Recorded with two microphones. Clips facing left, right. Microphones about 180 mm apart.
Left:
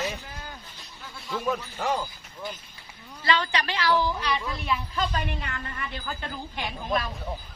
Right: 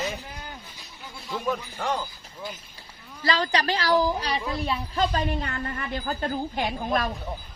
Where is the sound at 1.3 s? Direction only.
Centre (ahead or behind).